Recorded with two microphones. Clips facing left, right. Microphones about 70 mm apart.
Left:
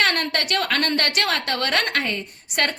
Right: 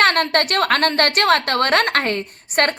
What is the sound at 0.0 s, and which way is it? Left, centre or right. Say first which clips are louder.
A woman's voice: right 6 dB; right.